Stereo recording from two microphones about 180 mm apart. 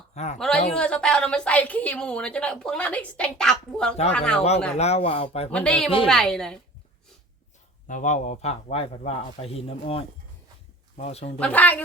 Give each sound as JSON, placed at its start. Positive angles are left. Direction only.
{"t": 0.1, "sound": "a man's voice", "side_deg": 35}
{"t": 0.3, "sound": "a woman's voice", "side_deg": 5}
{"t": 4.8, "sound": "a man's voice", "side_deg": 35}
{"t": 5.5, "sound": "a woman's voice", "side_deg": 5}
{"t": 7.9, "sound": "a man's voice", "side_deg": 45}
{"t": 11.3, "sound": "speech", "side_deg": 10}